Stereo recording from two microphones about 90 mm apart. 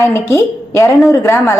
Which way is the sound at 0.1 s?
35° left (ahead or behind).